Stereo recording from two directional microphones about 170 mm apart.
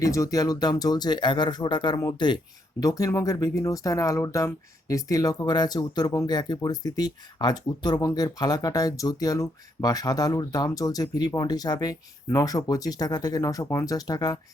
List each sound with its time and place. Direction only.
0.0 s speech: 20° left (ahead or behind)